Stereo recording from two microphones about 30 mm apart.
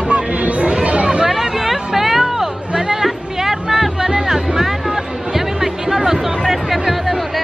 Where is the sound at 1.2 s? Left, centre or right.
Centre.